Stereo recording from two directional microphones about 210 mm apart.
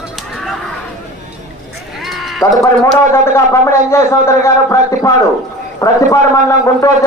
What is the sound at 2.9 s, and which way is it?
A man's voice, 10° left (ahead or behind).